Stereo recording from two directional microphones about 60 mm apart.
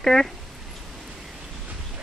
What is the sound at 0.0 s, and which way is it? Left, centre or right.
Speech, centre.